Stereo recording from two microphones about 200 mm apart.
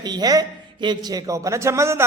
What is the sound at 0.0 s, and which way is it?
A man's voice, 20° right (ahead or behind).